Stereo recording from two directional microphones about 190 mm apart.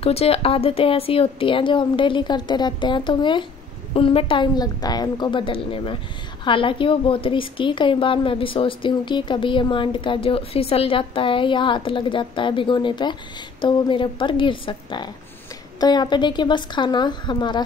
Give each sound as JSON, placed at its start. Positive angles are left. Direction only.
{"t": 0.0, "sound": "a woman's voice", "side_deg": 30}